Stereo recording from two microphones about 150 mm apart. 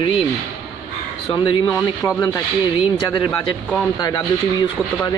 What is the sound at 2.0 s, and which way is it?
Speech, 20° left (ahead or behind).